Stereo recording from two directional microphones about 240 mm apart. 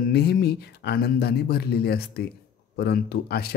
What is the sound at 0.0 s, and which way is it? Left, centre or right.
Speech, left.